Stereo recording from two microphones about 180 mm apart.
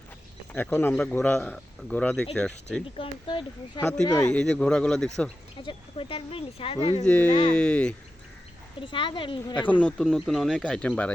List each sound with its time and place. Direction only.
0.5 s a man's voice: 10° left (ahead or behind)
3.0 s a woman's voice: 30° left (ahead or behind)
3.8 s speech: 5° left (ahead or behind)
4.0 s a woman's voice: 20° left (ahead or behind)
4.3 s speech: 5° left (ahead or behind)
5.6 s speech: 30° left (ahead or behind)
7.0 s a man's voice: 10° left (ahead or behind)
7.3 s speech: 30° left (ahead or behind)
7.5 s a man's voice: 5° left (ahead or behind)
8.8 s a woman's voice: 30° left (ahead or behind)
9.6 s speech: 10° left (ahead or behind)